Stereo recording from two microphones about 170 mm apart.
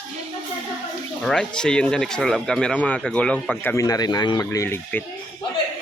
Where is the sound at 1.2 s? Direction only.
5° left (ahead or behind).